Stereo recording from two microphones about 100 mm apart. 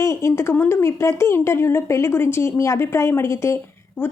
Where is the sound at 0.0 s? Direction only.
30° left (ahead or behind).